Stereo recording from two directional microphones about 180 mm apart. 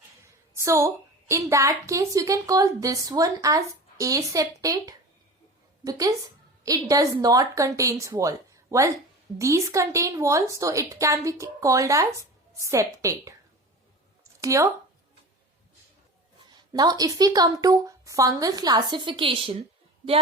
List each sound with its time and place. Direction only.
0.5 s a woman's voice: 15° right (ahead or behind)
14.4 s a woman's voice: 15° right (ahead or behind)
16.6 s a woman's voice: 20° right (ahead or behind)